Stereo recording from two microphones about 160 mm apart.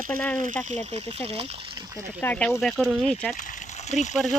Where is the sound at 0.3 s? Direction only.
50° right (ahead or behind).